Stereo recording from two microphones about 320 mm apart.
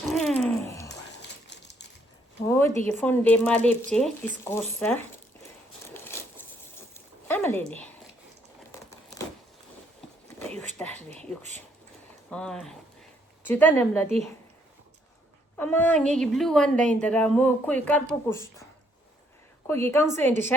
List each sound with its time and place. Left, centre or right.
0.1 s a sound: centre
1.5 s crushing: left
2.5 s a sound: centre
2.8 s a woman's voice: centre
5.9 s a sound: centre
8.7 s crumpling: centre
10.8 s a woman's voice: centre
15.5 s a woman's voice: centre
19.6 s a woman's voice: centre